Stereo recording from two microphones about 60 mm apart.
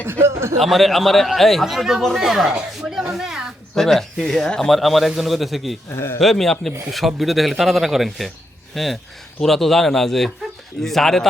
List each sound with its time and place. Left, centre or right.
0.0 s speech: right
0.6 s speech: centre
3.8 s speech: centre
5.9 s speech: left
6.1 s speech: centre